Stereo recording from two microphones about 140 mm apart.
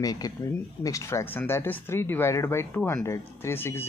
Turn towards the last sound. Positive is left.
turn(degrees=15)  # may be behind; listen again after turning